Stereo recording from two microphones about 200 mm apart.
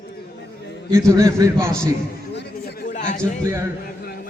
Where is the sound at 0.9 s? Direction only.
15° right (ahead or behind).